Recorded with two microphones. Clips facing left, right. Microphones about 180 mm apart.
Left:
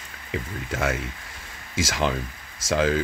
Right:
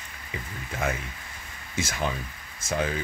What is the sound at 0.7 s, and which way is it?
Speech, 90° left.